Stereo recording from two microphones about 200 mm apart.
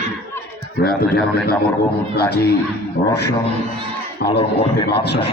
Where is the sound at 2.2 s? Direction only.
55° left (ahead or behind).